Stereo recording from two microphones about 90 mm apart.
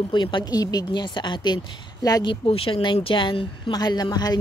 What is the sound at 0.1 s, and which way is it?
Speech, 60° left (ahead or behind).